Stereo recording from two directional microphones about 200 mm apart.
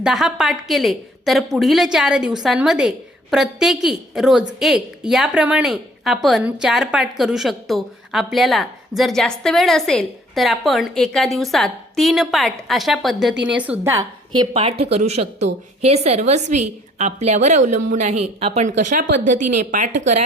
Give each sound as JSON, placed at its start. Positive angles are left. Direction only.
{"t": 0.0, "sound": "a woman's voice", "side_deg": 0}
{"t": 14.5, "sound": "speech", "side_deg": -30}